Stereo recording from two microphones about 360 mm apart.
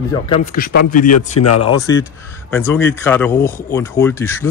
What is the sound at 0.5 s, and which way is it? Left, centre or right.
Speech, left.